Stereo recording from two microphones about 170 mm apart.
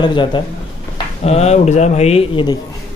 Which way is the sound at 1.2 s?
40° left (ahead or behind).